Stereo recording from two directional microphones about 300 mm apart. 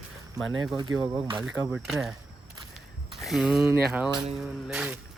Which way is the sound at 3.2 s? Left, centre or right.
Centre.